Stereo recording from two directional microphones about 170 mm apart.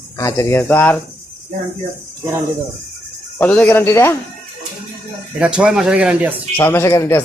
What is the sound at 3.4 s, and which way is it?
Speech, 10° left (ahead or behind).